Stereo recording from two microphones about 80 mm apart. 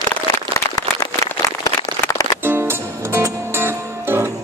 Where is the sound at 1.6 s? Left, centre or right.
Left.